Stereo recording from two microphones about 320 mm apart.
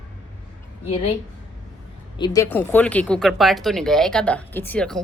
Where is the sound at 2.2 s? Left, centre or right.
Centre.